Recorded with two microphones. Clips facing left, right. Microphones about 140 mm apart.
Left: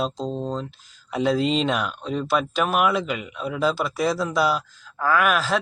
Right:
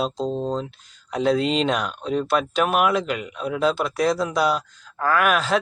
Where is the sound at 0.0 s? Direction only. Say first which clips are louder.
Right 2 dB; centre (ahead or behind).